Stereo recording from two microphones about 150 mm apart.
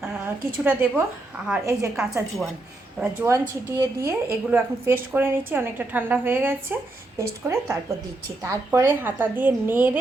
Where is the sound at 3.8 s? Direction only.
20° right (ahead or behind).